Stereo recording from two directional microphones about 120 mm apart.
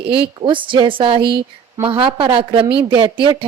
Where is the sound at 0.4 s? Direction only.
45° right (ahead or behind).